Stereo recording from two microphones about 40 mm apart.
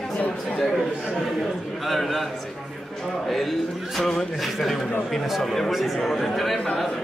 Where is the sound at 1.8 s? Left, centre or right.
Centre.